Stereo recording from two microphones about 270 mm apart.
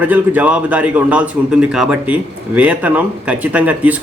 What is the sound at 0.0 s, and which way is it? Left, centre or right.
Speech, centre.